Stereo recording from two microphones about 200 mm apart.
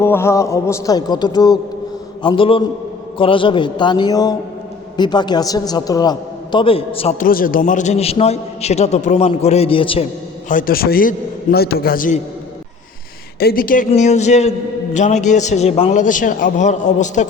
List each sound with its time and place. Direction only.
0.0 s a man's voice: 10° left (ahead or behind); by 7.3 s 30° left (ahead or behind)
7.3 s a man's voice: 45° left (ahead or behind); by 10.1 s 25° left (ahead or behind)
10.5 s a man's voice: 45° left (ahead or behind)
13.4 s a man's voice: 45° left (ahead or behind)